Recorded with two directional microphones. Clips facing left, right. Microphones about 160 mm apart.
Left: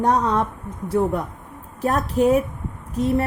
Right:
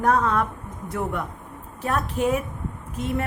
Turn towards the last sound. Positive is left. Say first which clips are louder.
# left 7 dB
turn(degrees=40)  # may be behind; listen again after turning